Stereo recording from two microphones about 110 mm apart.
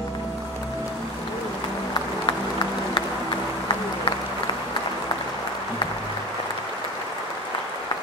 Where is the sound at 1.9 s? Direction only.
45° left (ahead or behind).